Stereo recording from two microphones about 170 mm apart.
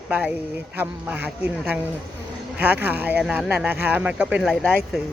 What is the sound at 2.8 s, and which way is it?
Speech, 10° right (ahead or behind).